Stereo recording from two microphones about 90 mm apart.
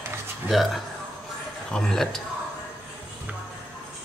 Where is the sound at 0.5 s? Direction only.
Centre (ahead or behind).